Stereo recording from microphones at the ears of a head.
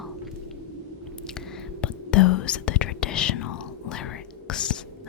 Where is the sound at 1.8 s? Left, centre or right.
Left.